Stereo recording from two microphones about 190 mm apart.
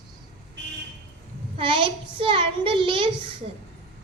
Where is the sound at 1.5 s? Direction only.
25° right (ahead or behind).